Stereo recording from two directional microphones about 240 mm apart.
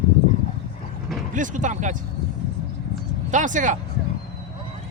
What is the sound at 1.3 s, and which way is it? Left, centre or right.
Speech, right.